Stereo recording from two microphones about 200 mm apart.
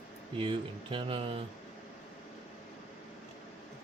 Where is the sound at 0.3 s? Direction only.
25° right (ahead or behind).